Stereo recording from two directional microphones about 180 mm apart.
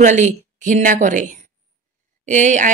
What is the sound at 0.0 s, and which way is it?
Speech, 45° right (ahead or behind).